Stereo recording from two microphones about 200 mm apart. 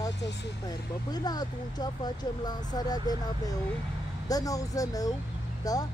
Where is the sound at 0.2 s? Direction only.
60° left (ahead or behind).